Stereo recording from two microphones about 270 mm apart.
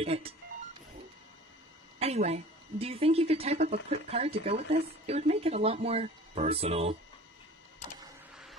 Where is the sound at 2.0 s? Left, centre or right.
Right.